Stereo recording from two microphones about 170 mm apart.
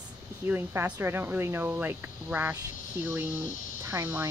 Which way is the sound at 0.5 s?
10° right (ahead or behind).